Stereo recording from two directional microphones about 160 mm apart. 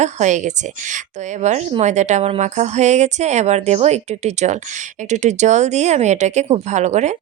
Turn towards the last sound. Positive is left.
turn(degrees=-45)  # may be behind; listen again after turning